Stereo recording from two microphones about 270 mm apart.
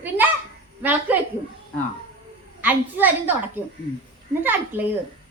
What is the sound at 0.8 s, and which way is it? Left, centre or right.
Speech, centre.